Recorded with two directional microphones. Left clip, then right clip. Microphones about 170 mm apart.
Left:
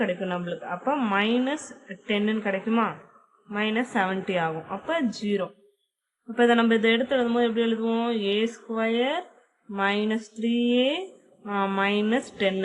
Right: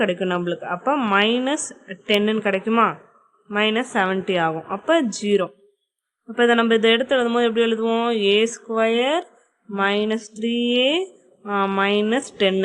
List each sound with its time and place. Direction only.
0.0 s a woman's voice: 35° right (ahead or behind)
6.3 s a woman's voice: 30° right (ahead or behind)